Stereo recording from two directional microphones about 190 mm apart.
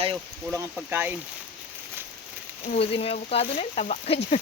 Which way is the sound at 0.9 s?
10° right (ahead or behind).